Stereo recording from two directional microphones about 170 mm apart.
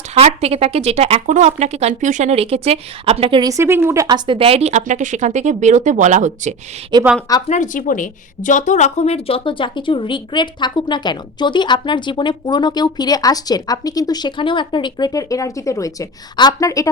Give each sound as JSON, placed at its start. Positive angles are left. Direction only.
{"t": 0.1, "sound": "speech", "side_deg": -35}
{"t": 3.5, "sound": "speech", "side_deg": -15}
{"t": 6.9, "sound": "a woman's voice", "side_deg": -25}
{"t": 7.5, "sound": "a woman's voice", "side_deg": 50}